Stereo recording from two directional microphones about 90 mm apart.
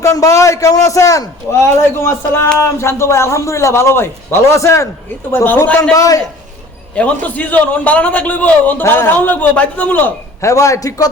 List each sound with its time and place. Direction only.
0.0 s a man's voice: 35° left (ahead or behind)
1.8 s a man's voice: 25° left (ahead or behind)
5.9 s a man's voice: 40° left (ahead or behind)
6.9 s a man's voice: 15° left (ahead or behind)
10.4 s a man's voice: 35° left (ahead or behind)